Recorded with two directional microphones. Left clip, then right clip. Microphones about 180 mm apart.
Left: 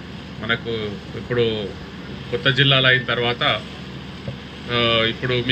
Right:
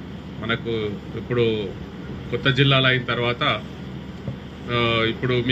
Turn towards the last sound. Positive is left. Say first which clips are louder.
# left 1 dB
turn(degrees=-45)  # may be behind; listen again after turning